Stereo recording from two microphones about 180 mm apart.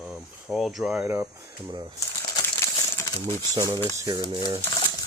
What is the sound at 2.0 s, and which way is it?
Crumpling, 15° left (ahead or behind).